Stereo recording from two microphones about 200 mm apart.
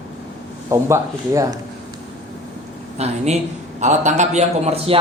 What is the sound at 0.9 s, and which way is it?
Speech, 15° right (ahead or behind).